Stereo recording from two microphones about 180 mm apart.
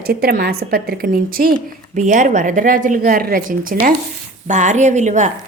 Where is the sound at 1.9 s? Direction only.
45° right (ahead or behind).